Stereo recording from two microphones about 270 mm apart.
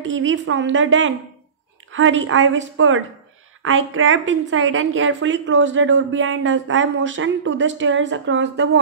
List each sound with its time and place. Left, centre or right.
0.0 s a woman's voice: right